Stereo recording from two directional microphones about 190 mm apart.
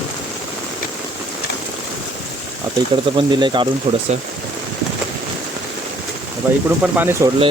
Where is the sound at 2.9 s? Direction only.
25° right (ahead or behind).